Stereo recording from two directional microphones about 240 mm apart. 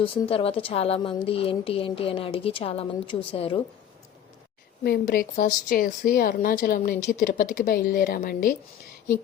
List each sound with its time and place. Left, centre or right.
0.0 s a woman's voice: left
4.8 s a woman's voice: left